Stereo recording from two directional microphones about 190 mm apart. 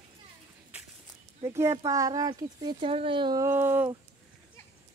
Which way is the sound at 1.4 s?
15° right (ahead or behind).